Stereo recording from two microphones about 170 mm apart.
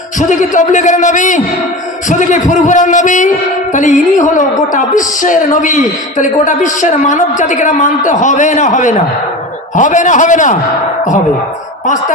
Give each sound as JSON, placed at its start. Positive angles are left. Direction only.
{"t": 0.2, "sound": "a man's voice", "side_deg": 50}